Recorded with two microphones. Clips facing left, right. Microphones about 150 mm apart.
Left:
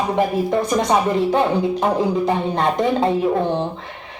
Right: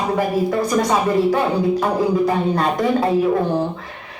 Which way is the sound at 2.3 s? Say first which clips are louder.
Right 1 dB; 25° left (ahead or behind).